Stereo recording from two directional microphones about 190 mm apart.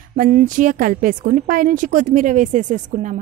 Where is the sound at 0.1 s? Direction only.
50° right (ahead or behind).